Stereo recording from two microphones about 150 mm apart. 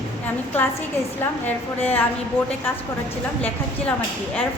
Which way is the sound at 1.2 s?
10° left (ahead or behind).